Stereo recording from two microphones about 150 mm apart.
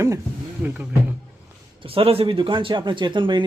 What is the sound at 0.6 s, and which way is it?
Speech, 10° right (ahead or behind).